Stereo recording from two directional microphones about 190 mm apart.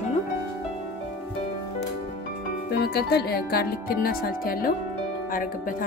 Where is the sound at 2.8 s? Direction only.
60° left (ahead or behind).